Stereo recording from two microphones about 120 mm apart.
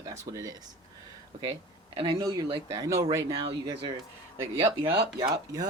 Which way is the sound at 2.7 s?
25° right (ahead or behind).